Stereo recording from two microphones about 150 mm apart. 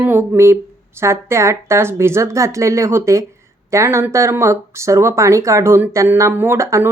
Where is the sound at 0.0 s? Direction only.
15° right (ahead or behind).